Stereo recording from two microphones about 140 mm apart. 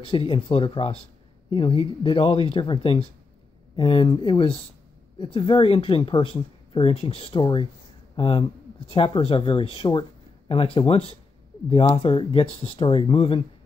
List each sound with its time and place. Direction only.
0.0 s speech: 40° left (ahead or behind)